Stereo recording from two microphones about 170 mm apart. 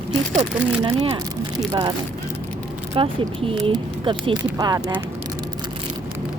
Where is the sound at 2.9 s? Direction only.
35° right (ahead or behind); by 5.0 s 15° right (ahead or behind).